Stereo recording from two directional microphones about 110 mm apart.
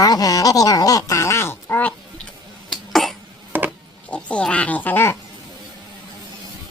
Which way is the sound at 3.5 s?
15° right (ahead or behind).